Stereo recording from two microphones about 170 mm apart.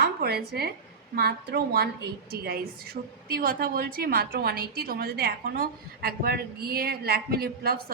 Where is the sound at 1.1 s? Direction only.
65° right (ahead or behind).